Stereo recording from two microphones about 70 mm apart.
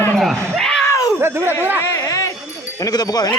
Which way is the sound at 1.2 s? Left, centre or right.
Right.